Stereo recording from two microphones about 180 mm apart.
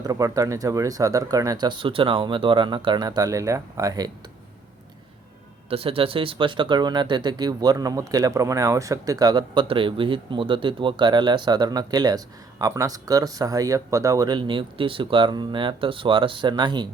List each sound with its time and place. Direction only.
0.0 s speech: 20° right (ahead or behind)
5.6 s speech: 30° right (ahead or behind)